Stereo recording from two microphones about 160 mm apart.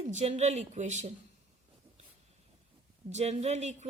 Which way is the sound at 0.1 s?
45° right (ahead or behind).